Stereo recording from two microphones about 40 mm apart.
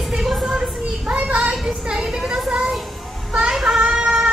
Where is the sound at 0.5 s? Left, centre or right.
Right.